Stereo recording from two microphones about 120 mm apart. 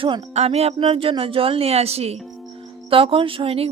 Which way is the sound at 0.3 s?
60° right (ahead or behind).